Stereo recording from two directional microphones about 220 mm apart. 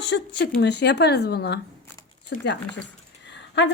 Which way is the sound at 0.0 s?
55° left (ahead or behind).